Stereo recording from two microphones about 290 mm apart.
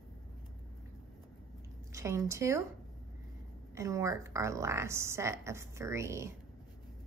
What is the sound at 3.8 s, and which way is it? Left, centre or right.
A woman's voice, centre.